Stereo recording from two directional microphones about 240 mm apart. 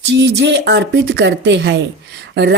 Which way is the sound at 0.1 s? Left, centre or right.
Right.